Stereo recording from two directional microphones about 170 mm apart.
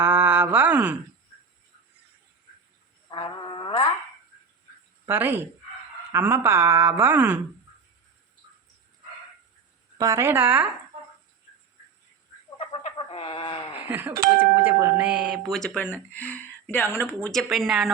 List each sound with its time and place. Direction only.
0.0 s a sound: 15° right (ahead or behind)
3.1 s music: 25° left (ahead or behind)
5.0 s speech: 15° right (ahead or behind)
10.0 s speech: 20° right (ahead or behind)
12.5 s chicken: 35° left (ahead or behind)
13.8 s speech: 10° right (ahead or behind)